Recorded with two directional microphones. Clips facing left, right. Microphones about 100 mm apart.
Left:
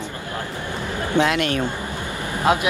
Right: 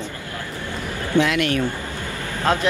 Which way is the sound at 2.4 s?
15° left (ahead or behind).